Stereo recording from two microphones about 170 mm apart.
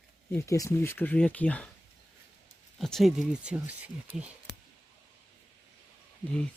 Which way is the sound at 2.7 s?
Centre (ahead or behind).